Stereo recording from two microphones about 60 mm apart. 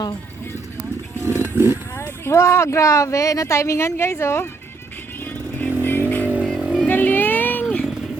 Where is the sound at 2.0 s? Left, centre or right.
Left.